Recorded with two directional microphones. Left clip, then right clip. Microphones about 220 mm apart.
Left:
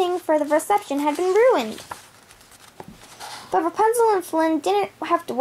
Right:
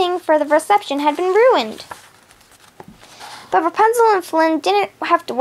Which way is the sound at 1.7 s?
Centre (ahead or behind).